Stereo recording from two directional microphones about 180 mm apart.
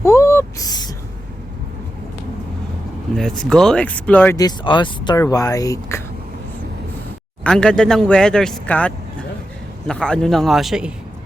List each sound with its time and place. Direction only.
0.0 s a sound: 15° left (ahead or behind)
3.2 s speech: 5° left (ahead or behind)
4.4 s speech: 25° left (ahead or behind)
7.4 s speech: 5° left (ahead or behind)